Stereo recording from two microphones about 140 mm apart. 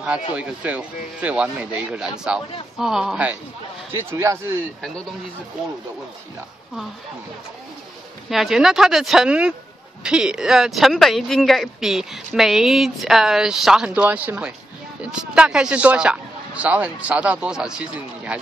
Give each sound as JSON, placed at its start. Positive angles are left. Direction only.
{"t": 0.3, "sound": "speech", "side_deg": -10}
{"t": 3.9, "sound": "speech", "side_deg": -15}
{"t": 8.3, "sound": "speech", "side_deg": 0}